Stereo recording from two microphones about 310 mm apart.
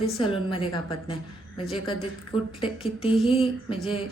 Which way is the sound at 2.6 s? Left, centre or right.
Centre.